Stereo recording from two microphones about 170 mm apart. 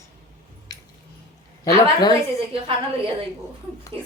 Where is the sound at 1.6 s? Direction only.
20° left (ahead or behind).